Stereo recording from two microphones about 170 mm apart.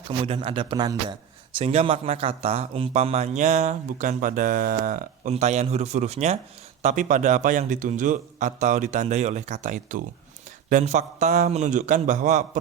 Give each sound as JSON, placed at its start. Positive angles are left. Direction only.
{"t": 0.3, "sound": "speech", "side_deg": -30}
{"t": 5.3, "sound": "a man's voice", "side_deg": -40}